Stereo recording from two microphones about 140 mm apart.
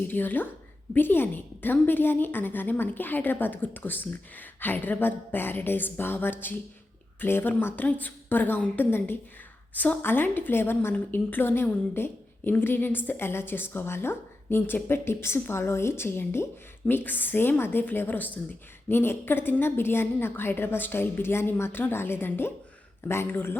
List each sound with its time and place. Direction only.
0.0 s a woman's voice: 15° left (ahead or behind)